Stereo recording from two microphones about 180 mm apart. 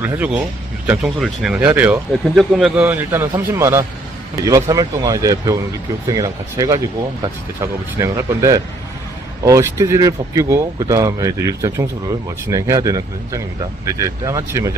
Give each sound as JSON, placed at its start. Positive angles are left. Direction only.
{"t": 0.0, "sound": "speech", "side_deg": -10}
{"t": 2.8, "sound": "speech", "side_deg": -15}